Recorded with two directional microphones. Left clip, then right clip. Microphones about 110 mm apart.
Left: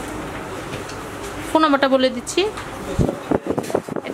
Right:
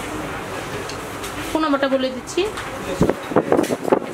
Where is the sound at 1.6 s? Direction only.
50° left (ahead or behind).